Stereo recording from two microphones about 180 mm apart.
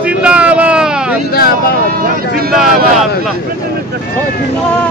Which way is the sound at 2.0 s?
55° right (ahead or behind).